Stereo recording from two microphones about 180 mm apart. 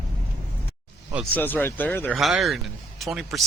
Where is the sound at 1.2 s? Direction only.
10° left (ahead or behind).